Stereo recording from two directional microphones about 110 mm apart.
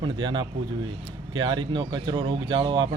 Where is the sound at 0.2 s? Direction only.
45° right (ahead or behind).